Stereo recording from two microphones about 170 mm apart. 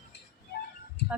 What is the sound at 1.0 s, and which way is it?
Heart sounds, 80° left.